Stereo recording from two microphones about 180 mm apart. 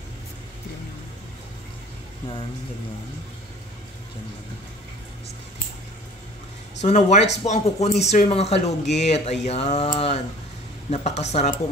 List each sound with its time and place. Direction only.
6.8 s speech: 40° left (ahead or behind)